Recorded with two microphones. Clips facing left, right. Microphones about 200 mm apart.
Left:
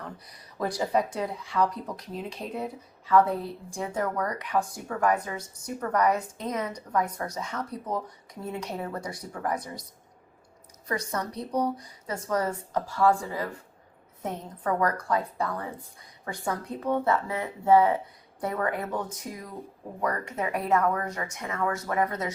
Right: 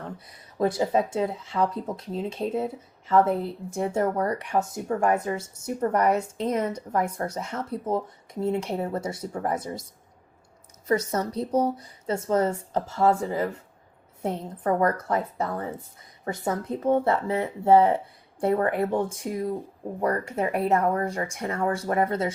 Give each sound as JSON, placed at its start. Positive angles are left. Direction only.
{"t": 0.0, "sound": "speech", "side_deg": -25}
{"t": 10.8, "sound": "speech", "side_deg": -25}
{"t": 14.8, "sound": "speech", "side_deg": -25}